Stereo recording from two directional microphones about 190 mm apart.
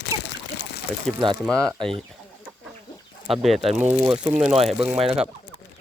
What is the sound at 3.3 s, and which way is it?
Speech, centre (ahead or behind).